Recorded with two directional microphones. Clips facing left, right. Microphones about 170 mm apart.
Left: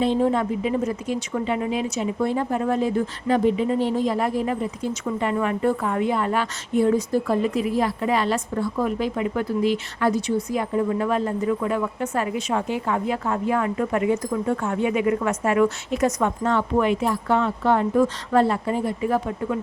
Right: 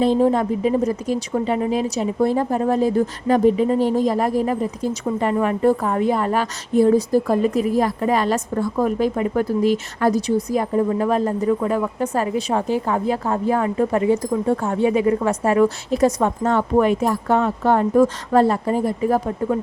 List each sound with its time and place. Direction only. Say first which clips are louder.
0.0 s speech: right 4 dB; 40° right (ahead or behind)